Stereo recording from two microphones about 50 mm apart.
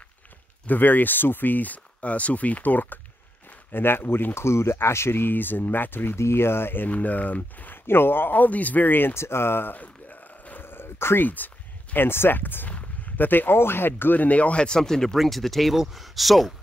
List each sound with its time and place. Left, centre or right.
0.7 s speech: left
4.5 s speech: left
6.1 s speech: left
6.9 s speech: left
7.8 s speech: left
9.2 s speech: left
9.8 s a sound: left
10.6 s a sound: left
11.2 s speech: left; by 16.5 s centre